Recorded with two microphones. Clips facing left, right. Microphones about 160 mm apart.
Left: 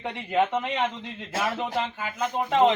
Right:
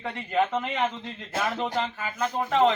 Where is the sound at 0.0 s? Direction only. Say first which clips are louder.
Left 1 dB; 15° left (ahead or behind).